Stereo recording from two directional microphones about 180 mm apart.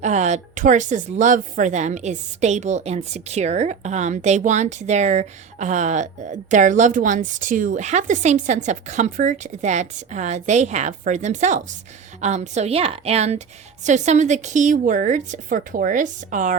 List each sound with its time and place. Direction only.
0.0 s a woman's voice: 40° right (ahead or behind)